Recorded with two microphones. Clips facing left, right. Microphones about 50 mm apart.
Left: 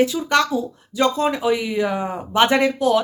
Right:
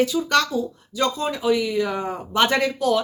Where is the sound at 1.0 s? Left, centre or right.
Left.